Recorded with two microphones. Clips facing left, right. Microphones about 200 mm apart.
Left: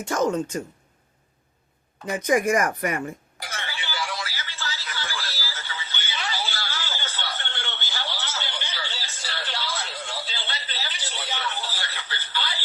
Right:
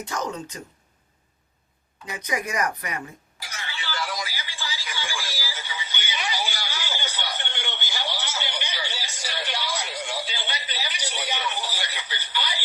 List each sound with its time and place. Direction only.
0.0 s speech: 50° left (ahead or behind)
2.0 s speech: 50° left (ahead or behind)
4.1 s a sound: 15° right (ahead or behind)